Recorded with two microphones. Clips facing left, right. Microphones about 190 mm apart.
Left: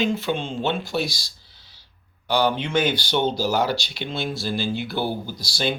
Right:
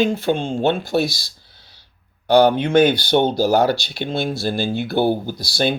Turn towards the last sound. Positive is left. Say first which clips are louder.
# right 5 dB
turn(degrees=-55)  # may be behind; listen again after turning